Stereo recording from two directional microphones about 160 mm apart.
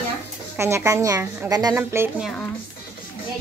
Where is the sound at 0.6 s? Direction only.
15° right (ahead or behind).